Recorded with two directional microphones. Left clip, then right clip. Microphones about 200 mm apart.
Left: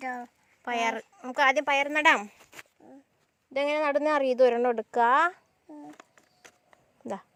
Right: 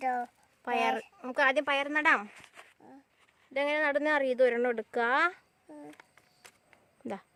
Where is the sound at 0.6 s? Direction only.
5° left (ahead or behind).